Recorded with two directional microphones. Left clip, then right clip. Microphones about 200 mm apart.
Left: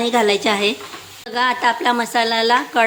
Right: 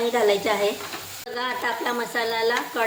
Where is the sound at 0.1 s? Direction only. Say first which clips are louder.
Left 6 dB; 50° left (ahead or behind).